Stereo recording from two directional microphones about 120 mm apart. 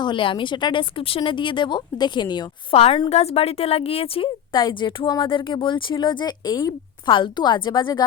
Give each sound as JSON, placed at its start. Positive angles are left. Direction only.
{"t": 0.0, "sound": "speech", "side_deg": 45}
{"t": 2.7, "sound": "a woman's voice", "side_deg": 50}
{"t": 4.5, "sound": "speech", "side_deg": 40}